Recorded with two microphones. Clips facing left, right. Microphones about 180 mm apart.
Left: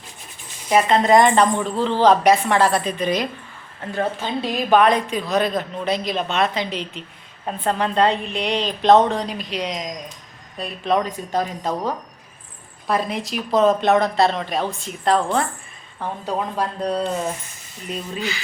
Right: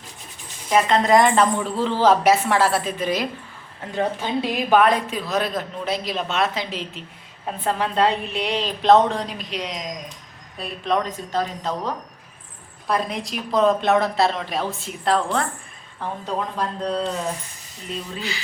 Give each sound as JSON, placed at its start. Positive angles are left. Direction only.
{"t": 0.7, "sound": "a woman's voice", "side_deg": 5}
{"t": 12.9, "sound": "a woman's voice", "side_deg": 0}
{"t": 18.2, "sound": "a sound", "side_deg": -35}